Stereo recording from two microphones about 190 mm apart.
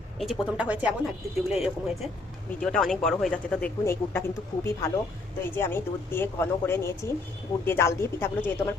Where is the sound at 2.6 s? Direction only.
5° left (ahead or behind).